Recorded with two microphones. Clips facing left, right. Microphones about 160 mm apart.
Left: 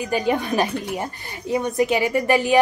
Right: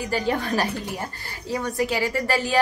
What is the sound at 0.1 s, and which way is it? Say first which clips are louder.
A woman's voice: left 3 dB; 15° left (ahead or behind).